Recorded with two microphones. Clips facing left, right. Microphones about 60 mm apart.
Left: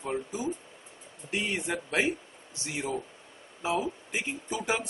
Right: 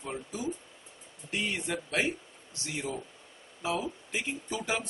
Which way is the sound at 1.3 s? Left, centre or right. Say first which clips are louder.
Left 2 dB; centre.